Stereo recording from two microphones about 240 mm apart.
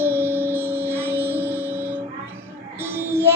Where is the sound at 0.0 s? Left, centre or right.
Centre.